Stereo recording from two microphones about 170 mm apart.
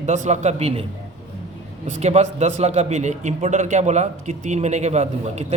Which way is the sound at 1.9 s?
40° right (ahead or behind).